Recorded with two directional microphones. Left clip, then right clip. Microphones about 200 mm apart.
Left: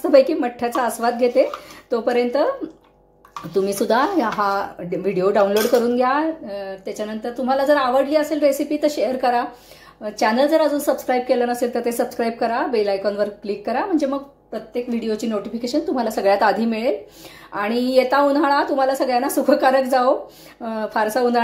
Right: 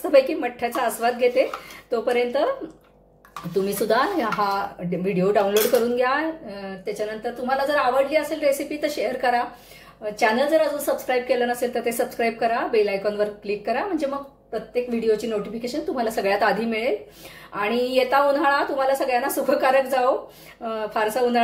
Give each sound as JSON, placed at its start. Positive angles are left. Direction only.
{"t": 0.0, "sound": "a woman's voice", "side_deg": 25}
{"t": 3.6, "sound": "a woman's voice", "side_deg": 25}
{"t": 6.6, "sound": "a woman's voice", "side_deg": 35}